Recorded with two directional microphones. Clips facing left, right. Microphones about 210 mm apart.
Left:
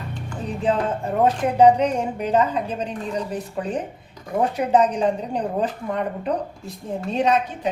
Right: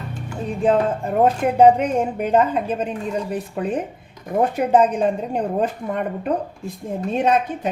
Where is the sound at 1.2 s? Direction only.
55° right (ahead or behind).